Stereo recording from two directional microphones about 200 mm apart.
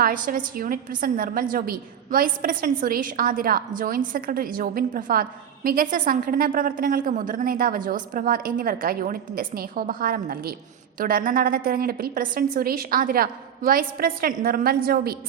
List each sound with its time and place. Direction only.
0.0 s a woman's voice: 45° right (ahead or behind)